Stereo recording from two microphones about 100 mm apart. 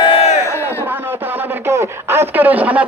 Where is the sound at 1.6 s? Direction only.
25° right (ahead or behind).